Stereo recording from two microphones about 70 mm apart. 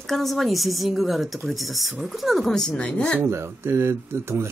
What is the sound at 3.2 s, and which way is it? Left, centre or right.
Speech, right.